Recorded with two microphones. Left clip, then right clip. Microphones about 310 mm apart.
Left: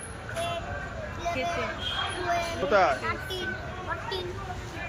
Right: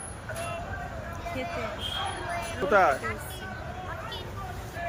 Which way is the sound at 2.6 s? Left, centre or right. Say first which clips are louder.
Right 1 dB; centre.